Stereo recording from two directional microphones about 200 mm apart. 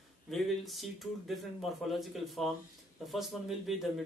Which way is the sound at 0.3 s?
Centre (ahead or behind).